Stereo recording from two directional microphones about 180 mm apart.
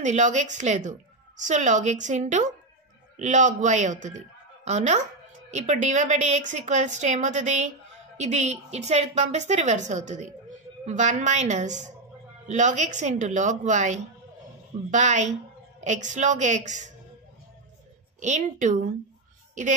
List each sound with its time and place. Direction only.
0.0 s a woman's voice: 40° right (ahead or behind)
18.2 s a woman's voice: 40° right (ahead or behind)